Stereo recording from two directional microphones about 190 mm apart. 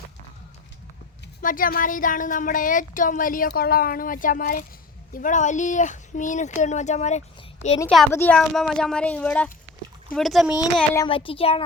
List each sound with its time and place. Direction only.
1.4 s speech: 45° left (ahead or behind)
7.9 s a woman's voice: 5° left (ahead or behind)
10.9 s a child's voice: 25° left (ahead or behind)